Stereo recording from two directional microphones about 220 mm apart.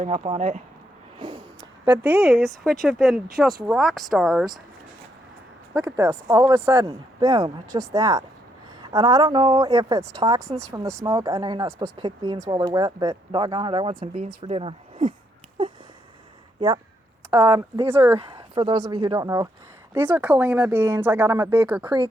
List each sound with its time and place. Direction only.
0.0 s speech: 30° right (ahead or behind)
1.2 s a sound: 20° right (ahead or behind)
2.0 s speech: centre (ahead or behind)
5.7 s speech: 10° right (ahead or behind)
10.4 s speech: 30° right (ahead or behind)
11.0 s speech: 20° right (ahead or behind)
16.6 s speech: 20° right (ahead or behind)
18.2 s speech: 20° right (ahead or behind)
21.8 s speech: 20° right (ahead or behind)